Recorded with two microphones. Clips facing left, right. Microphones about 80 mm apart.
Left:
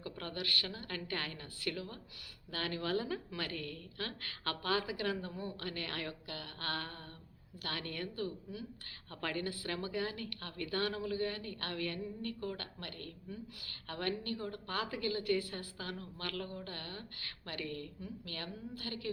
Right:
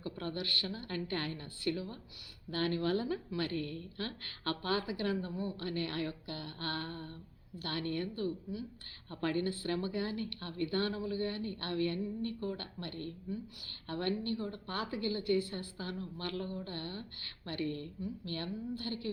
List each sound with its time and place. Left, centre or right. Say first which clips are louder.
0.0 s a woman's voice: right 3 dB; right